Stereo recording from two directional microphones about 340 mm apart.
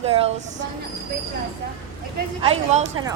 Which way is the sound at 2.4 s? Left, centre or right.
Centre.